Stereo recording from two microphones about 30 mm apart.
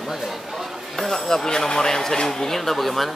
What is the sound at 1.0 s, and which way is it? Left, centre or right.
Speech, centre.